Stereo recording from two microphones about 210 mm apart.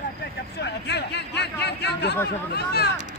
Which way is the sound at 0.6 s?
55° left (ahead or behind).